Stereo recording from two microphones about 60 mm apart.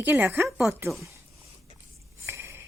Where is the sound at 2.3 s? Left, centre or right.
Right.